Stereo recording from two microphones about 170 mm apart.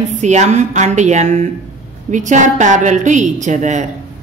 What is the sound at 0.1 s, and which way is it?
A woman's voice, 45° right (ahead or behind).